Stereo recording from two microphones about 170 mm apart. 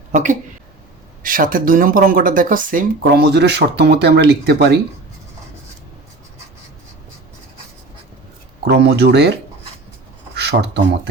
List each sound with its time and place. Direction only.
0.1 s a woman's voice: 50° right (ahead or behind); by 4.8 s 75° right (ahead or behind)
8.6 s speech: 75° right (ahead or behind)
10.3 s speech: 75° right (ahead or behind)